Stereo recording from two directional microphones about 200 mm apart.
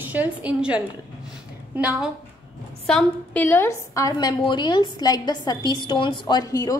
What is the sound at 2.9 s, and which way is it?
A woman's voice, 10° left (ahead or behind).